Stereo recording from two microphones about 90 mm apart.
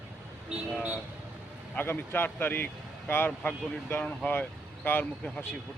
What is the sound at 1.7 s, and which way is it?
Speech, 25° left (ahead or behind).